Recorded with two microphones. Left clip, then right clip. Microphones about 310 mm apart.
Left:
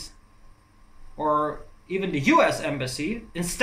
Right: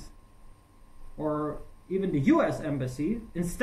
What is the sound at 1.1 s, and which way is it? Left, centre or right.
Speech, left.